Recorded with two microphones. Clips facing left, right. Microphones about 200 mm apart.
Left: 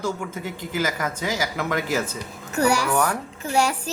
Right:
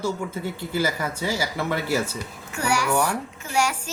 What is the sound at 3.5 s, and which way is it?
Speech, 35° left (ahead or behind).